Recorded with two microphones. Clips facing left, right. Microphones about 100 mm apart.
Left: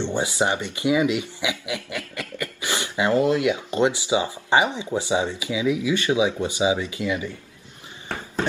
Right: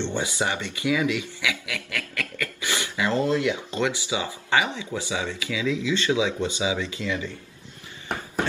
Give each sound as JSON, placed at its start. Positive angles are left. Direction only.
{"t": 0.0, "sound": "speech", "side_deg": 15}